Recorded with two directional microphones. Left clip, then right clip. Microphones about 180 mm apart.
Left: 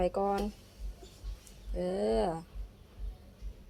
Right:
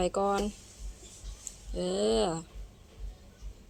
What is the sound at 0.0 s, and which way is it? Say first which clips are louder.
Speech: right 2 dB; 25° right (ahead or behind).